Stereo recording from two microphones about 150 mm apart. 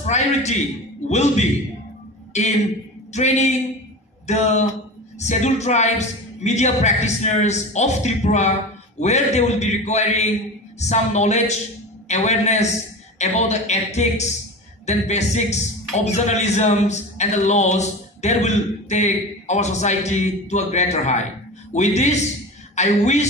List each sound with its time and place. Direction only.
0.0 s a man's voice: 50° left (ahead or behind)